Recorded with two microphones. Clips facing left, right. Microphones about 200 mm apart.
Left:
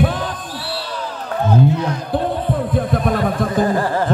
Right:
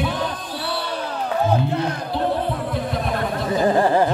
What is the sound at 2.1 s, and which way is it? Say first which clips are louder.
Music: left 3 dB; 50° left (ahead or behind).